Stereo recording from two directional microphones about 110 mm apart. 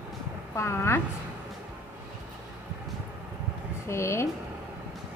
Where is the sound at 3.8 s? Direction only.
25° left (ahead or behind).